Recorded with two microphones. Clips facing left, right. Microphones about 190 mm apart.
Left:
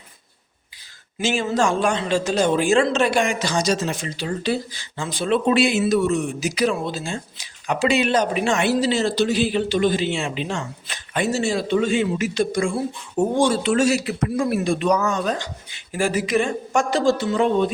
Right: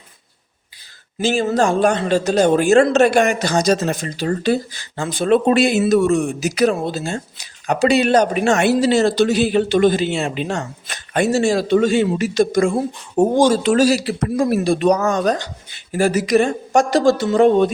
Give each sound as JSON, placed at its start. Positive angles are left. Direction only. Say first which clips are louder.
{"t": 1.2, "sound": "a man's voice", "louder": "right 4 dB", "side_deg": -40}
{"t": 3.5, "sound": "a man's voice", "louder": "right 5 dB", "side_deg": -40}